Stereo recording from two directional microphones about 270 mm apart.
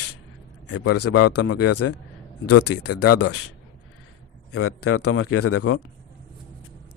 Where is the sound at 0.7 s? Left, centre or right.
Left.